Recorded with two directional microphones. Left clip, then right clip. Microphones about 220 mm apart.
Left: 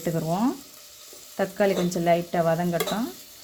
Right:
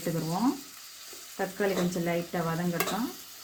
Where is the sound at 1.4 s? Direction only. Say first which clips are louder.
Left 6 dB; 55° left (ahead or behind).